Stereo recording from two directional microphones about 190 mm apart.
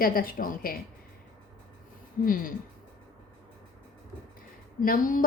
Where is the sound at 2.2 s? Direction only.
45° left (ahead or behind).